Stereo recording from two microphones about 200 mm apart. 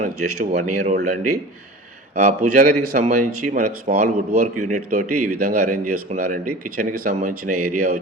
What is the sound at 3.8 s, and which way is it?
A man's voice, 35° right (ahead or behind).